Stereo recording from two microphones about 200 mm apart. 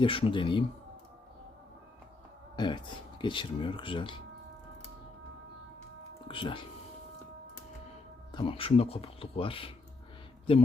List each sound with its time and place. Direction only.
0.0 s speech: 25° left (ahead or behind)
2.6 s speech: 20° left (ahead or behind)
6.2 s speech: 25° left (ahead or behind)
8.3 s speech: 25° left (ahead or behind)